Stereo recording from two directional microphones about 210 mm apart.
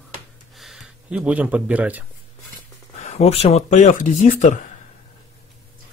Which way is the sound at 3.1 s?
30° left (ahead or behind).